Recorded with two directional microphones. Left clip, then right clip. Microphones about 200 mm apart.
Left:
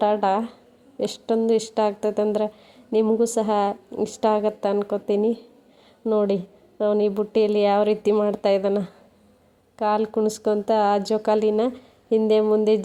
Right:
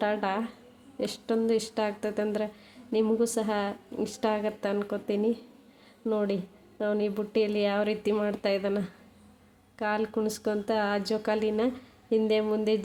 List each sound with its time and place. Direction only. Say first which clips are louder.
0.0 s speech: left 8 dB; 20° left (ahead or behind)